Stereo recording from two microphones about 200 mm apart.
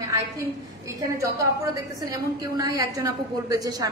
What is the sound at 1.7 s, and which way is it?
A woman's voice, 20° right (ahead or behind).